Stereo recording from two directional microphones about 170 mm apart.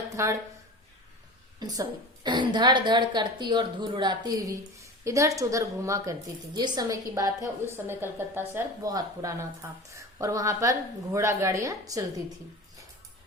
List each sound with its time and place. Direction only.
0.2 s speech: 15° right (ahead or behind)
1.5 s a woman's voice: 25° right (ahead or behind)